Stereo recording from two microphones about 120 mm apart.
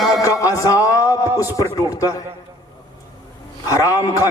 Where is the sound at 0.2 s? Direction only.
30° left (ahead or behind).